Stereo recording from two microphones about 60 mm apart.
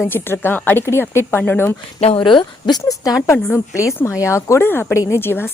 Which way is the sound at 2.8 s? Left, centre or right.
Left.